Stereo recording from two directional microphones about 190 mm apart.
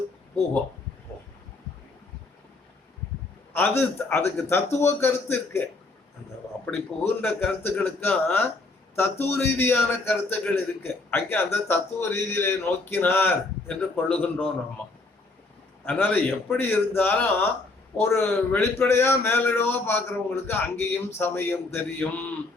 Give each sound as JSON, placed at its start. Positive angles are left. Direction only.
{"t": 3.5, "sound": "a man's voice", "side_deg": 10}
{"t": 6.7, "sound": "a man's voice", "side_deg": 10}
{"t": 15.8, "sound": "a man's voice", "side_deg": 10}